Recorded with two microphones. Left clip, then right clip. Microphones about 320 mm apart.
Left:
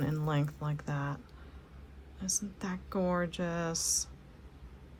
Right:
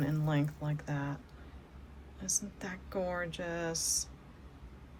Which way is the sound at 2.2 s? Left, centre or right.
Centre.